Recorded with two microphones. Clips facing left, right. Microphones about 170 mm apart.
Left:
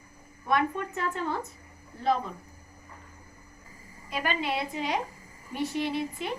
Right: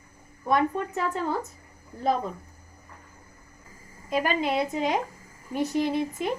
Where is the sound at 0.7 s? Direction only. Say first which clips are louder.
Right 4 dB; 40° right (ahead or behind).